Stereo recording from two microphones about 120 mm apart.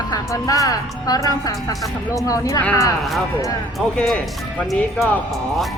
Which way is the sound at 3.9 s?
10° left (ahead or behind).